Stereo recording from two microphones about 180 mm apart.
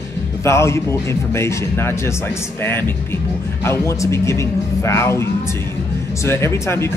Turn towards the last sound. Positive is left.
turn(degrees=15)  # may be behind; listen again after turning